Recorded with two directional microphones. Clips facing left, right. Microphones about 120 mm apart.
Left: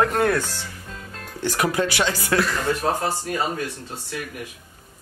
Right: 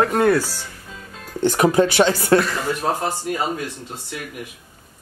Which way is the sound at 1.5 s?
25° right (ahead or behind).